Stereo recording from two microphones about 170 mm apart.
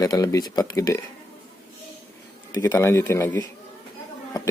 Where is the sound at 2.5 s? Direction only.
20° left (ahead or behind).